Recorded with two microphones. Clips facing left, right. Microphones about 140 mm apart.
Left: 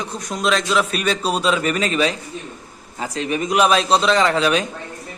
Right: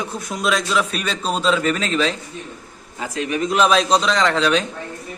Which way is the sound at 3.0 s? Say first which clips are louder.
Even; 30° left (ahead or behind).